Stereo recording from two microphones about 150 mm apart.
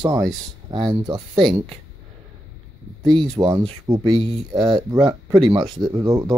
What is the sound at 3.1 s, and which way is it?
Speech, 30° right (ahead or behind).